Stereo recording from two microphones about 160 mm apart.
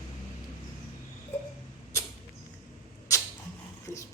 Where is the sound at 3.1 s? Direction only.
20° left (ahead or behind).